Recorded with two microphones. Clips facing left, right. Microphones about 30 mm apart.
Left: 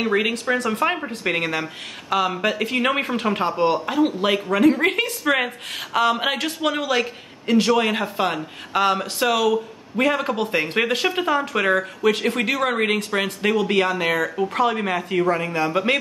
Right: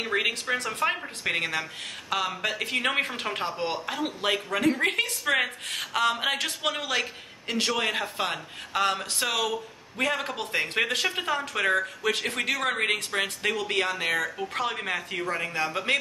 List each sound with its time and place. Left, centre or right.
0.5 s speech: centre
10.1 s a man's voice: centre
10.5 s speech: centre